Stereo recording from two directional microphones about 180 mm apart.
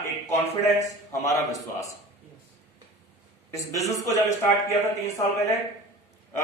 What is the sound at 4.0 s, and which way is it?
Speech, 20° left (ahead or behind).